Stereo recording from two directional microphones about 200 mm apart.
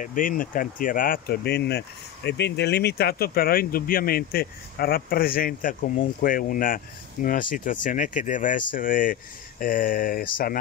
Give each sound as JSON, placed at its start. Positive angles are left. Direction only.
{"t": 0.0, "sound": "speech", "side_deg": 40}